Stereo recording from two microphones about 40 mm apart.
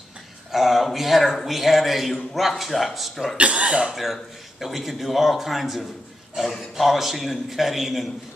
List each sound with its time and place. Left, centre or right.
0.5 s a sound: centre
0.9 s a man's voice: centre
3.3 s speech: right
3.9 s a man's voice: centre